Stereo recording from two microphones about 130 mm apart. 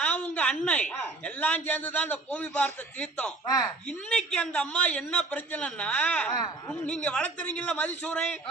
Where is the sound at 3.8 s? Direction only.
5° left (ahead or behind).